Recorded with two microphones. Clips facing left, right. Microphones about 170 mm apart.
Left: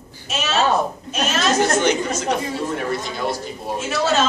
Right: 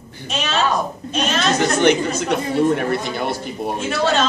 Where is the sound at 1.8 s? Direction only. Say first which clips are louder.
Right 4 dB; 60° right (ahead or behind).